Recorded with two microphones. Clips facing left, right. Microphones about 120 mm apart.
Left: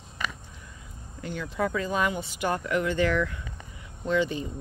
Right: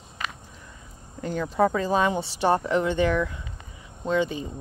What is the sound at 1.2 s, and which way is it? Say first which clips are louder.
Speech: right 6 dB; 40° right (ahead or behind).